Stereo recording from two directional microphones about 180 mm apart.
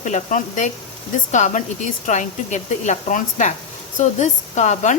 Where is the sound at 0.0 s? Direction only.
45° left (ahead or behind).